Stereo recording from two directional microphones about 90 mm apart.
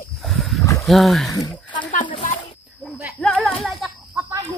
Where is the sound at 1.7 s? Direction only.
65° left (ahead or behind).